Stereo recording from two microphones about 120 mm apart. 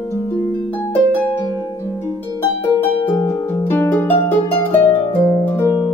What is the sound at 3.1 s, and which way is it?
Harp, 25° left (ahead or behind).